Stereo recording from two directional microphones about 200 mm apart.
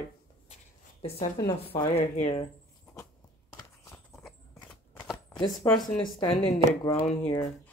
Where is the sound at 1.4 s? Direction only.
20° left (ahead or behind).